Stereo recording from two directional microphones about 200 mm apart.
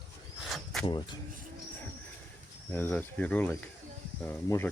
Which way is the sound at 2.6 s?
10° left (ahead or behind).